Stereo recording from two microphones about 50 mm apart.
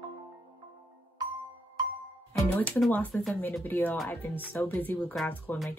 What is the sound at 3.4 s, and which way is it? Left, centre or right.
Speech, left.